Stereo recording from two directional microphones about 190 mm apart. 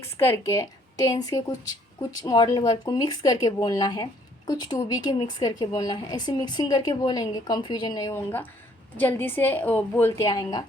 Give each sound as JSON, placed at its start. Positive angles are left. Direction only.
{"t": 0.2, "sound": "a woman's voice", "side_deg": 15}